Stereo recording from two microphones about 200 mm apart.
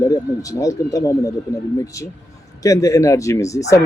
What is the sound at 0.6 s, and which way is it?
Speech, 15° left (ahead or behind).